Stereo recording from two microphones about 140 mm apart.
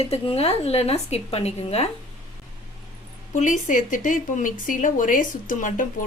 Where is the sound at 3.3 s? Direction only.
60° left (ahead or behind).